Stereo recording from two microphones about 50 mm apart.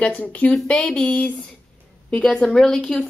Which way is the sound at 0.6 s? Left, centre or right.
Centre.